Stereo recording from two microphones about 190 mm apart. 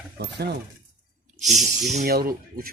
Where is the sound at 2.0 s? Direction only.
50° right (ahead or behind).